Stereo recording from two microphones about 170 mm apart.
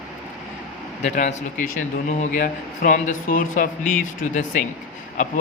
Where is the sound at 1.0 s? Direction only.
45° left (ahead or behind).